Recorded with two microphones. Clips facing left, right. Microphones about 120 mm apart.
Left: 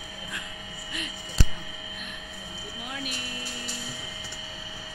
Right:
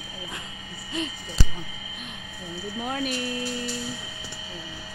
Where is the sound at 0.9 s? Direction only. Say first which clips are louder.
Right 9 dB; 25° right (ahead or behind).